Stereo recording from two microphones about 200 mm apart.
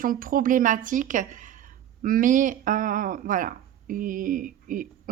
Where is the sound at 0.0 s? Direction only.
45° right (ahead or behind).